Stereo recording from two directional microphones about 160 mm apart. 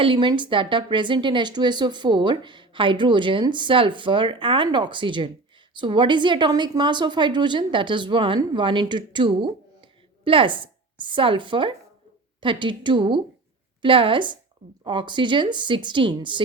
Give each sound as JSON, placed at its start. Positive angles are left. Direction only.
{"t": 0.0, "sound": "a woman's voice", "side_deg": -30}